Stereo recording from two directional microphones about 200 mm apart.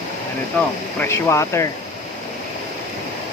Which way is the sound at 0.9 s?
15° left (ahead or behind).